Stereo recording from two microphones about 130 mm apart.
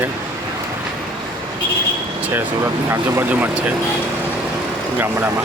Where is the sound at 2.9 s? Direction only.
20° right (ahead or behind).